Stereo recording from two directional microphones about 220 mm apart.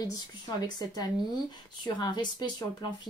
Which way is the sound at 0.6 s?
20° left (ahead or behind).